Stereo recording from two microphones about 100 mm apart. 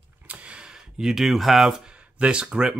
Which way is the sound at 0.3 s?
10° right (ahead or behind).